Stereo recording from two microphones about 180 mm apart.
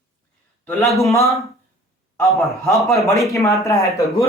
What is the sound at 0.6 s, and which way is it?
Speech, 15° left (ahead or behind).